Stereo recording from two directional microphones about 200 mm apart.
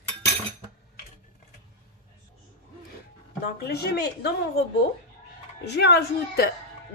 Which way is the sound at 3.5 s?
55° left (ahead or behind).